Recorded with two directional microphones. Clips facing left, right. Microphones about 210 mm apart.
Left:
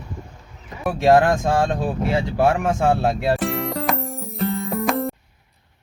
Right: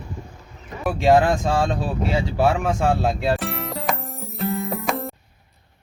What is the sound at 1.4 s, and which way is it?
Speech, 15° left (ahead or behind).